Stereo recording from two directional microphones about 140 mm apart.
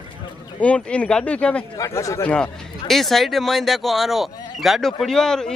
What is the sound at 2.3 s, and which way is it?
Speech, 5° left (ahead or behind).